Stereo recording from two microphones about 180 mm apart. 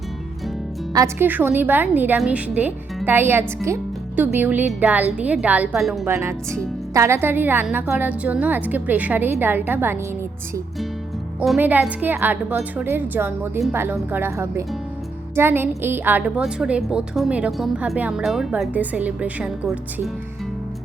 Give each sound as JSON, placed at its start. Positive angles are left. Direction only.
{"t": 0.9, "sound": "a woman's voice", "side_deg": -15}
{"t": 6.1, "sound": "a woman's voice", "side_deg": -15}
{"t": 11.3, "sound": "a woman's voice", "side_deg": -5}